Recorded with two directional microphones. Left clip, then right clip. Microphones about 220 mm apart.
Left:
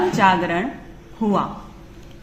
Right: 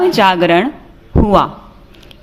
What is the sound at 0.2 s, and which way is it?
Speech, 45° right (ahead or behind).